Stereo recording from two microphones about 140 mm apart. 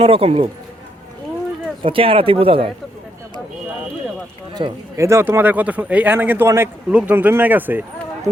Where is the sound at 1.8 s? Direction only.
40° right (ahead or behind).